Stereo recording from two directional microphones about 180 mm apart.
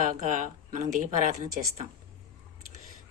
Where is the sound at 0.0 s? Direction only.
45° right (ahead or behind).